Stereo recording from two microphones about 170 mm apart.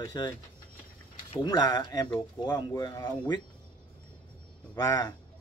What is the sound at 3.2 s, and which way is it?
Speech, 25° left (ahead or behind).